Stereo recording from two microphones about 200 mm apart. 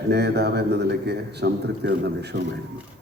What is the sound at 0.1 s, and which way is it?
A man's voice, 55° right (ahead or behind).